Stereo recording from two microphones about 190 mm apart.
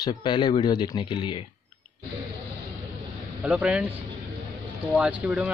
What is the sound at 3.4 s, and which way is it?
Speech, 5° right (ahead or behind).